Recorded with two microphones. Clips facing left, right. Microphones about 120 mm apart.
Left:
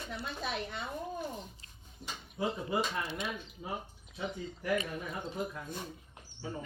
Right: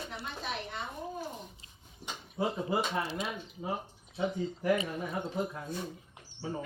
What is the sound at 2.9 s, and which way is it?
A woman's voice, 30° right (ahead or behind).